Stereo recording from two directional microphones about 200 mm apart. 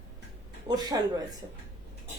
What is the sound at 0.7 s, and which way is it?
Speech, 20° right (ahead or behind).